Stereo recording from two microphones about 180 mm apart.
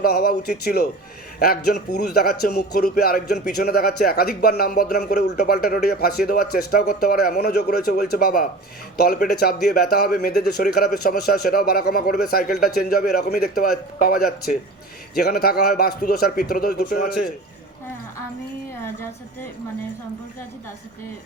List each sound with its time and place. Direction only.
0.0 s a man's voice: 55° left (ahead or behind)